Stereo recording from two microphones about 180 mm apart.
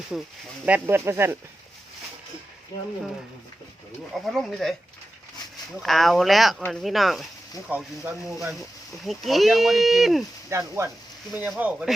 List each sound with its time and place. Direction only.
0.1 s speech: 5° right (ahead or behind)
4.3 s speech: centre (ahead or behind)
5.7 s speech: centre (ahead or behind)
10.5 s speech: 15° right (ahead or behind)